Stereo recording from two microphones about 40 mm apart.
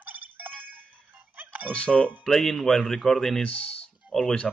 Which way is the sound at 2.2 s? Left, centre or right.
Centre.